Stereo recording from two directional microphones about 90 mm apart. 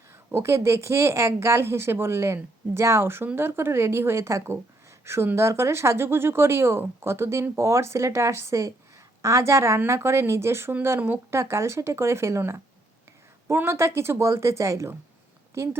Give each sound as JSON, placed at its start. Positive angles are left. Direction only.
{"t": 0.1, "sound": "a woman's voice", "side_deg": -30}